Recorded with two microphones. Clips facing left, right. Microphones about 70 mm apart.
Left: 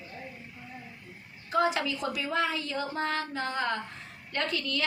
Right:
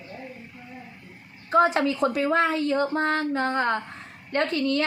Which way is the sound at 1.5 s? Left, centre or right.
Right.